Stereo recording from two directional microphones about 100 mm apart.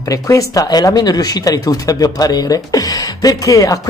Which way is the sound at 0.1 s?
35° left (ahead or behind).